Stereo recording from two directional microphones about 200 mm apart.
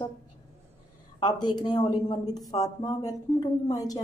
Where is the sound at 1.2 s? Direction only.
20° left (ahead or behind).